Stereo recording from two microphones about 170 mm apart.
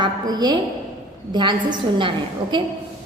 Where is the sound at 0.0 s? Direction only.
25° right (ahead or behind).